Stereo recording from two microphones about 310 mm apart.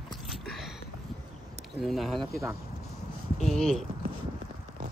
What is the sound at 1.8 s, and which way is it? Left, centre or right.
Speech, centre.